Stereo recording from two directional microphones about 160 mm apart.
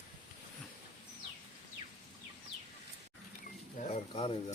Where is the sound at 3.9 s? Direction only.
35° left (ahead or behind).